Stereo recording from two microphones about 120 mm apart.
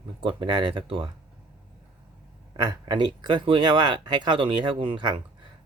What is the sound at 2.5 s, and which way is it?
Speech, 35° right (ahead or behind).